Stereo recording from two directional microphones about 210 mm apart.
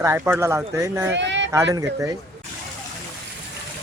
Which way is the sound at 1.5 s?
10° right (ahead or behind).